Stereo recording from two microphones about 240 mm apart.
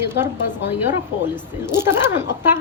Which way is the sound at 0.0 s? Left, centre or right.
Centre.